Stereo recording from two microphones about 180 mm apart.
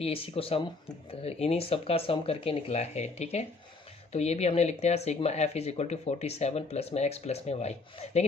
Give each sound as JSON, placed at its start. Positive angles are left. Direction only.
{"t": 0.0, "sound": "speech", "side_deg": 30}